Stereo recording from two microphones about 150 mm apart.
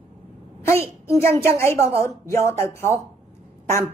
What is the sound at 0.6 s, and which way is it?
A woman's voice, 15° left (ahead or behind).